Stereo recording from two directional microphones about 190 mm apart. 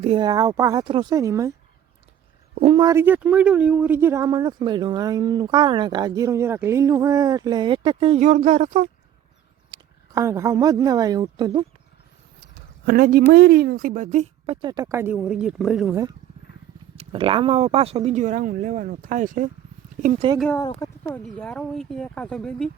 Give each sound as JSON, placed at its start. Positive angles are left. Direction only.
{"t": 0.0, "sound": "speech", "side_deg": -25}
{"t": 2.6, "sound": "speech", "side_deg": -35}
{"t": 2.8, "sound": "speech", "side_deg": -10}
{"t": 9.7, "sound": "a woman's voice", "side_deg": -15}
{"t": 12.8, "sound": "speech", "side_deg": -50}
{"t": 16.9, "sound": "speech", "side_deg": -30}
{"t": 20.5, "sound": "speech", "side_deg": 15}